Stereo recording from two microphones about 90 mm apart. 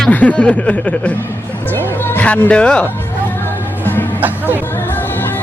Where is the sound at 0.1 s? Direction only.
15° left (ahead or behind).